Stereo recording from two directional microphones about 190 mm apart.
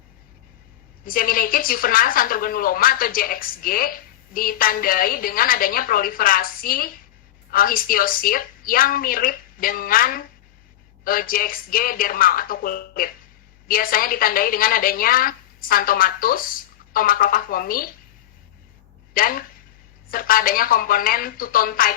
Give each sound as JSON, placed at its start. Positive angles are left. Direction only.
{"t": 1.0, "sound": "a woman's voice", "side_deg": 50}
{"t": 19.1, "sound": "a woman's voice", "side_deg": 50}